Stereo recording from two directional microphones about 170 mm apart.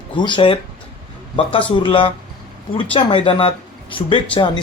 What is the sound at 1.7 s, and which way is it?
Speech, 30° left (ahead or behind).